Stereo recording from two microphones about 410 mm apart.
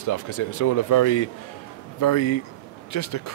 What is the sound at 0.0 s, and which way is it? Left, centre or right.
Speech, left.